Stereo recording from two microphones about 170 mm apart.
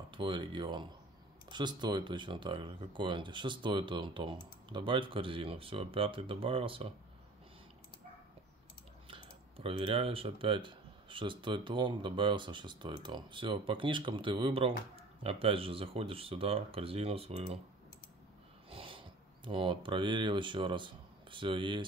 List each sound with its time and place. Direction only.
0.1 s speech: 30° right (ahead or behind)
9.0 s speech: 35° right (ahead or behind)
18.7 s speech: 30° right (ahead or behind)